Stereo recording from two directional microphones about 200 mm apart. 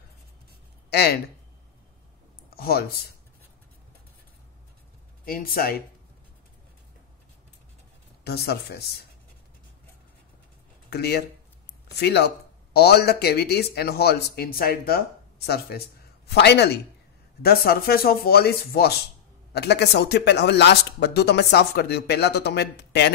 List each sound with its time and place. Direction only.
0.8 s speech: 55° left (ahead or behind)
2.5 s speech: 50° left (ahead or behind)
5.2 s speech: 45° left (ahead or behind)
8.2 s speech: 55° left (ahead or behind)
10.9 s speech: 55° left (ahead or behind)